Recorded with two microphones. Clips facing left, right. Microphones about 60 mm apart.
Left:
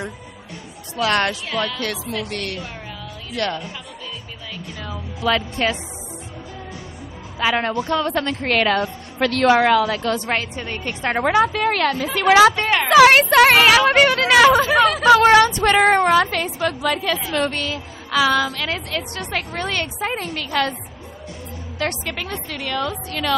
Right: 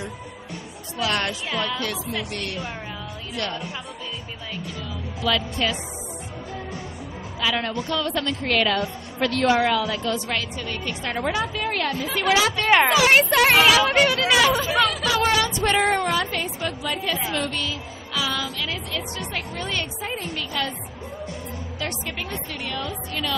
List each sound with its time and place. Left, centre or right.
1.0 s a woman's voice: left
3.4 s a woman's voice: left
4.9 s speech: left
7.3 s a woman's voice: left
10.2 s a woman's voice: left
11.2 s a woman's voice: left
12.6 s speech: centre
12.9 s a woman's voice: left
15.2 s child singing: left
16.0 s a woman's voice: left
17.3 s a woman's voice: left
21.8 s a woman's voice: left